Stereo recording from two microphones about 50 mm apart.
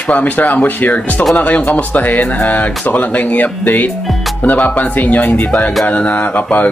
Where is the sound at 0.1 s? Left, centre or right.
Left.